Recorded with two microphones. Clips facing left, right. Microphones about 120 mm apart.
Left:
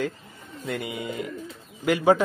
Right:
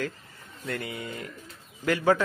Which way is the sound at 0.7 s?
15° left (ahead or behind).